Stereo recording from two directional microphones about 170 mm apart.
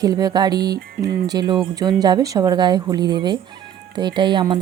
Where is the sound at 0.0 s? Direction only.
20° right (ahead or behind).